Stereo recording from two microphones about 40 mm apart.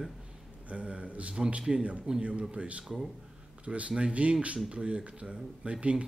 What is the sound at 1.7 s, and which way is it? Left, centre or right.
Speech, centre.